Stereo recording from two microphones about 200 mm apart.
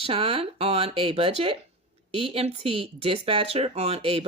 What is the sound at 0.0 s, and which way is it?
Speech, 30° right (ahead or behind).